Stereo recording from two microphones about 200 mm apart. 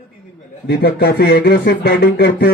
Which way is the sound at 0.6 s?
55° left (ahead or behind).